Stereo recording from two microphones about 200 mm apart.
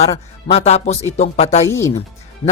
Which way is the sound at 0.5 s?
30° left (ahead or behind).